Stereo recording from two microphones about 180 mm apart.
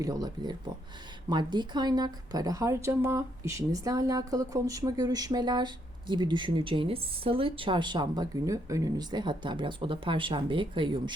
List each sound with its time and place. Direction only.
0.0 s a woman's voice: 20° right (ahead or behind)